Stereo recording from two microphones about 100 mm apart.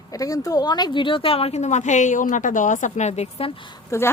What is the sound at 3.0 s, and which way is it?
Speech, 90° left.